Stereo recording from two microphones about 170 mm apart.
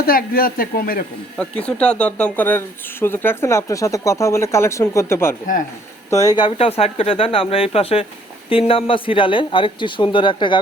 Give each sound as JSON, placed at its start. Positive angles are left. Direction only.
{"t": 0.0, "sound": "speech", "side_deg": 60}
{"t": 1.4, "sound": "speech", "side_deg": 5}